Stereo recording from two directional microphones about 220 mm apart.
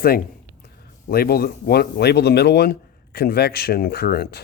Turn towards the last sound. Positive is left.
turn(degrees=45)  # may be behind; listen again after turning